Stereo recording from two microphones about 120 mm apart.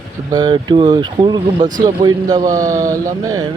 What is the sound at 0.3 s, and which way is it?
Speech, 40° right (ahead or behind).